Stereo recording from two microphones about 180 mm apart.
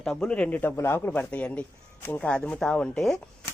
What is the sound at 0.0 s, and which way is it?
A man's voice, 5° left (ahead or behind).